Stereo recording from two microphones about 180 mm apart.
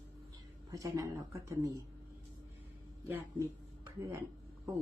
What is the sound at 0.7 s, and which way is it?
Speech, 20° right (ahead or behind).